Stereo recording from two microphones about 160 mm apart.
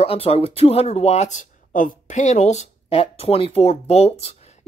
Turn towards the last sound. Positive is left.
turn(degrees=40)  # may be behind; listen again after turning